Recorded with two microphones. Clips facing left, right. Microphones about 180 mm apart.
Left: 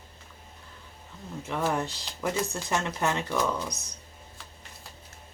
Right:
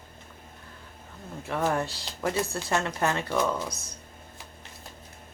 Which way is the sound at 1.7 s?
20° left (ahead or behind).